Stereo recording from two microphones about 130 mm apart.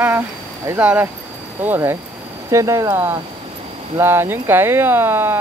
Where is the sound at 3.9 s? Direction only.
15° right (ahead or behind).